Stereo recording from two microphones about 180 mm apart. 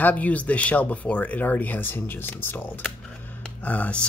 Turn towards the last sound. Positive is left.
turn(degrees=5)  # may be behind; listen again after turning